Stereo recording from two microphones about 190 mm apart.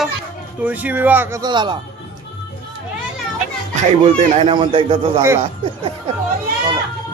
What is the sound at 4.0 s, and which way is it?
Speech, 30° right (ahead or behind).